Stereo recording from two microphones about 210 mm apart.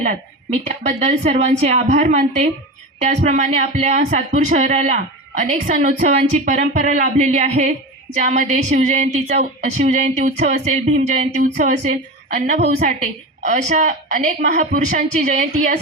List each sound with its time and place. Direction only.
0.9 s speech: 35° right (ahead or behind)